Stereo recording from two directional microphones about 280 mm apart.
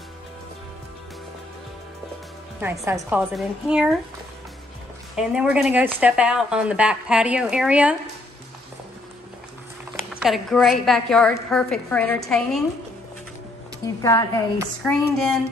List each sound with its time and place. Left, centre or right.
2.6 s speech: centre
5.1 s speech: centre
10.1 s speech: centre
13.8 s a woman's voice: centre
14.8 s speech: centre